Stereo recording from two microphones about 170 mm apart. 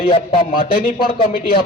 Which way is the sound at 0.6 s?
60° left (ahead or behind).